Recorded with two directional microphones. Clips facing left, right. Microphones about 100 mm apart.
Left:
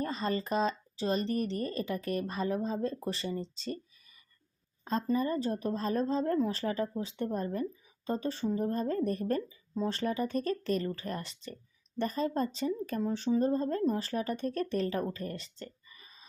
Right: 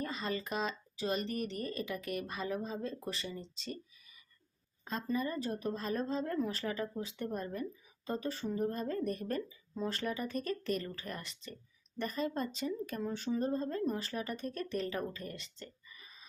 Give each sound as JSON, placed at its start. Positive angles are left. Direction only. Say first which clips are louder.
{"t": 0.0, "sound": "speech", "louder": "left 5 dB", "side_deg": 35}
{"t": 4.9, "sound": "speech", "louder": "left 6 dB", "side_deg": 35}
{"t": 15.5, "sound": "a sound", "louder": "left 4 dB", "side_deg": 40}